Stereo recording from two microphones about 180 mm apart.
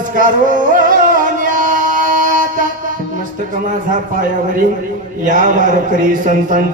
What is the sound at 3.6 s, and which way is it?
A man's voice, 45° right (ahead or behind).